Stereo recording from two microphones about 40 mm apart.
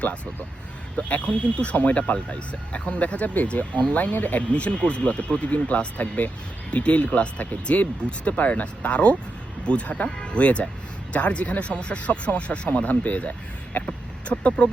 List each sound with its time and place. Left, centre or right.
0.9 s speech: left